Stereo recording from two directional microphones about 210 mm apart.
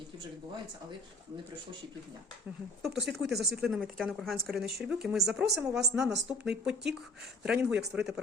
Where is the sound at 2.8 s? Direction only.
Centre (ahead or behind).